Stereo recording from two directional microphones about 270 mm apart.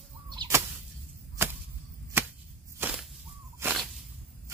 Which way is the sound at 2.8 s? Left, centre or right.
Centre.